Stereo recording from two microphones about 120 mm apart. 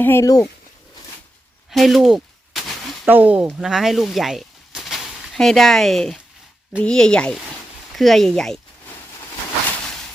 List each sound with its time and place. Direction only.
0.0 s speech: 20° left (ahead or behind)
1.7 s a sound: centre (ahead or behind)
3.1 s speech: 15° right (ahead or behind)
3.4 s speech: 5° right (ahead or behind)